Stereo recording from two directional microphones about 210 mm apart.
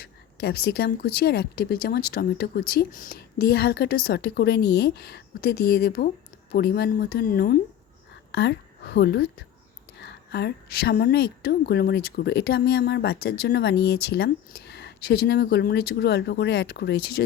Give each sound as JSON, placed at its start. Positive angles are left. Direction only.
{"t": 0.0, "sound": "a woman's voice", "side_deg": 50}